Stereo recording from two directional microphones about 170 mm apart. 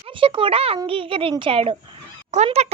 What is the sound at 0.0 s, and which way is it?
A child's voice, 30° right (ahead or behind).